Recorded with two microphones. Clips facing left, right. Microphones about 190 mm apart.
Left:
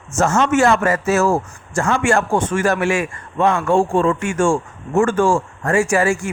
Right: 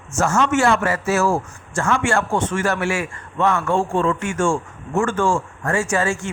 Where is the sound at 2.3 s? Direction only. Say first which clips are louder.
Left 3 dB; 15° left (ahead or behind).